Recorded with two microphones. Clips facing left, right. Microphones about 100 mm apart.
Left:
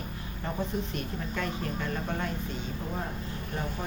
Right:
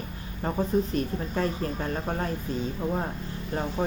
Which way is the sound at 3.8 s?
45° right (ahead or behind).